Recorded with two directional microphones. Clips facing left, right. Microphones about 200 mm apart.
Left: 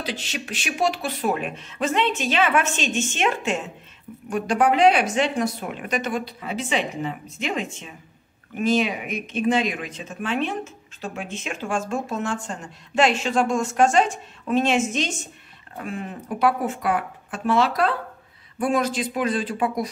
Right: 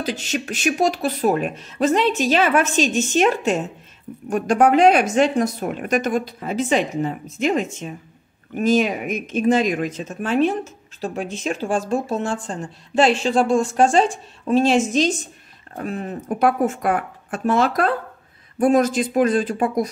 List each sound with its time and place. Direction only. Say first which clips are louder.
0.0 s a woman's voice: right 6 dB; 45° right (ahead or behind)